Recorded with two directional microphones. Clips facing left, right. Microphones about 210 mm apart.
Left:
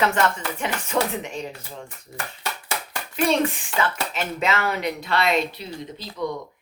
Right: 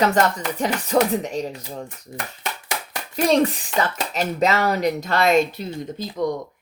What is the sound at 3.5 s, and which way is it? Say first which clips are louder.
Speech: right 2 dB; 40° right (ahead or behind).